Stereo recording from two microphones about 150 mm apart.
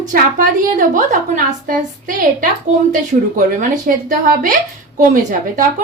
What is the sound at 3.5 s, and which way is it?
A woman's voice, 60° right (ahead or behind).